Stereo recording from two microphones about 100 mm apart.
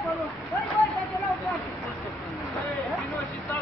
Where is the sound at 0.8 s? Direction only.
30° left (ahead or behind).